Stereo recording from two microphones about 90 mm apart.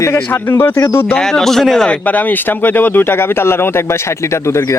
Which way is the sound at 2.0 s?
20° left (ahead or behind).